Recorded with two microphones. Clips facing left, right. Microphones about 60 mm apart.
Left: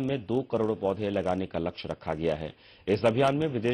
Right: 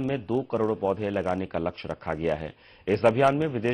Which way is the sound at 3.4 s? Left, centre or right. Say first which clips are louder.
Right 1 dB; right.